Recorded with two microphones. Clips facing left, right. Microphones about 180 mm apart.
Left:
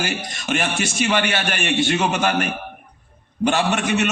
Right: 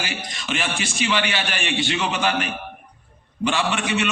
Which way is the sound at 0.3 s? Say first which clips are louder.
Left 3 dB; 50° left (ahead or behind).